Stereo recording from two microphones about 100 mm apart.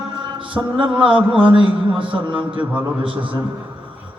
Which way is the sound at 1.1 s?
60° right (ahead or behind).